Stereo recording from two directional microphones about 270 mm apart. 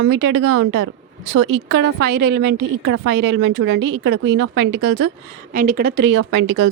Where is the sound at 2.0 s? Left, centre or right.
Right.